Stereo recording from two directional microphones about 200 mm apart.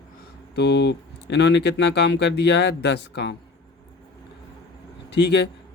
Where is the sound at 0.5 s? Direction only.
55° left (ahead or behind).